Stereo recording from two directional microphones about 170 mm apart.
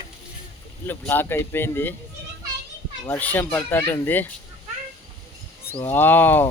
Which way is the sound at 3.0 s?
10° left (ahead or behind).